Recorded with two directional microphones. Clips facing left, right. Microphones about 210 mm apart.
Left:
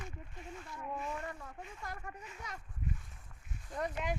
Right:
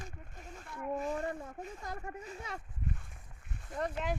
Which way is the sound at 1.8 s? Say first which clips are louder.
Right 1 dB; 25° right (ahead or behind).